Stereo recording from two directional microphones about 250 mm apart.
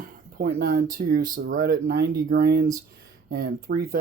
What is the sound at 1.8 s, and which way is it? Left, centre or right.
Speech, right.